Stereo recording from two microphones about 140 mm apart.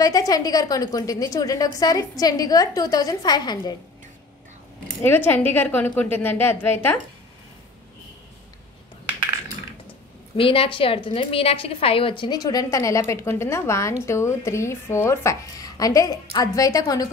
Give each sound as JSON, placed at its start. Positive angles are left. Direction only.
{"t": 0.0, "sound": "a woman's voice", "side_deg": 25}
{"t": 5.0, "sound": "a woman's voice", "side_deg": 15}
{"t": 10.3, "sound": "a woman's voice", "side_deg": 40}